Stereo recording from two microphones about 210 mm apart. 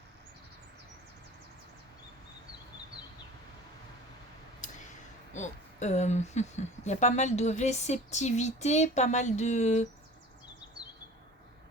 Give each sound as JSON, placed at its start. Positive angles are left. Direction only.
{"t": 5.3, "sound": "speech", "side_deg": 35}